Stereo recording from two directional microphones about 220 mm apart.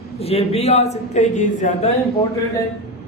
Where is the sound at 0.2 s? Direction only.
25° left (ahead or behind).